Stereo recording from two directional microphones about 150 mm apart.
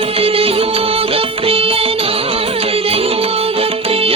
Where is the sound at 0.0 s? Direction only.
40° right (ahead or behind).